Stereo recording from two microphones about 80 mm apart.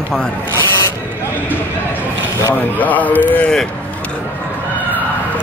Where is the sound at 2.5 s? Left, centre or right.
Left.